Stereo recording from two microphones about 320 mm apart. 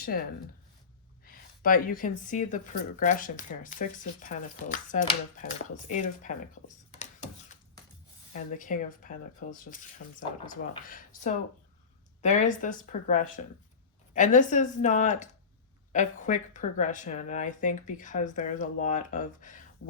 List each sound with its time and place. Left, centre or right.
0.0 s speech: left
6.9 s a sound: left
8.3 s speech: left